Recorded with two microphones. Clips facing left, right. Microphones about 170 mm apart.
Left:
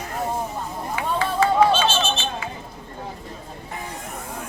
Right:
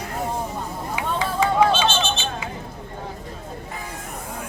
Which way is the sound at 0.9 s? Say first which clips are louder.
Left 1 dB; 15° right (ahead or behind).